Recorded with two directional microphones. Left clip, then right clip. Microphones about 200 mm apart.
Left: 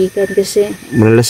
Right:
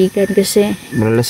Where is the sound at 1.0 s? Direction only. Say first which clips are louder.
Left 5 dB; 30° left (ahead or behind).